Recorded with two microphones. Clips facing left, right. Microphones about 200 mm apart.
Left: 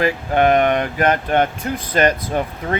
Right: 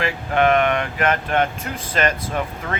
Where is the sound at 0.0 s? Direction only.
35° left (ahead or behind).